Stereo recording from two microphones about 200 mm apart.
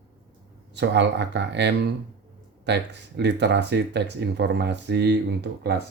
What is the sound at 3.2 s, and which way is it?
Speech, 60° right (ahead or behind).